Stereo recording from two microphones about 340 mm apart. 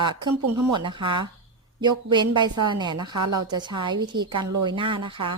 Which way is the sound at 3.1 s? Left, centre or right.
Right.